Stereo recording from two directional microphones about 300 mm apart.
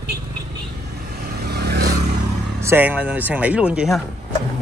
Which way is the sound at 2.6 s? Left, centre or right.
Centre.